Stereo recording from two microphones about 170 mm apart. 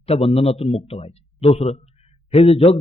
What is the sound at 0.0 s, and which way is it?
A man's voice, 35° left (ahead or behind).